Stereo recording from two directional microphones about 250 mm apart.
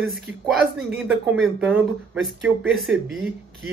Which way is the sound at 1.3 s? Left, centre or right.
Centre.